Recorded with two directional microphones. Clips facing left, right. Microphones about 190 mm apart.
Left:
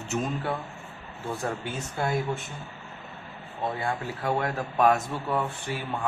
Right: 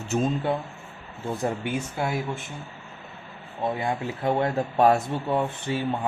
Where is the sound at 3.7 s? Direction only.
20° right (ahead or behind).